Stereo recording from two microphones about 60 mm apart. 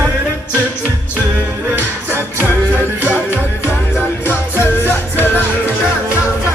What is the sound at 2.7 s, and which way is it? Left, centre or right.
Music, right.